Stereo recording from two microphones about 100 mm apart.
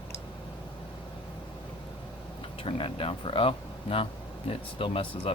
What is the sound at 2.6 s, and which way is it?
Speech, 60° left (ahead or behind).